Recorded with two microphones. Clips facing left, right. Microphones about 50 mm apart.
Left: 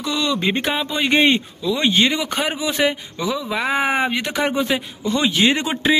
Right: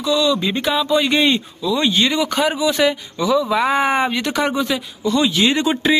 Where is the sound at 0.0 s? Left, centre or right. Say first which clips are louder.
Right 3 dB; left.